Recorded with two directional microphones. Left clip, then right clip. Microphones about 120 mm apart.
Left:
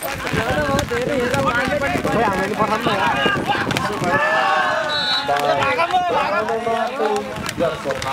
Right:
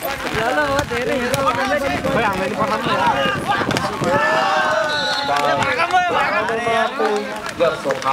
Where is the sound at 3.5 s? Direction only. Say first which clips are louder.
Right 1 dB; centre (ahead or behind).